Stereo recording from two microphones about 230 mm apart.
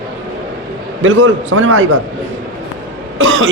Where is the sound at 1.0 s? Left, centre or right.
Right.